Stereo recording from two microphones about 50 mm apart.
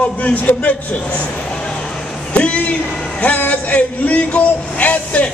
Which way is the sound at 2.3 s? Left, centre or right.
Left.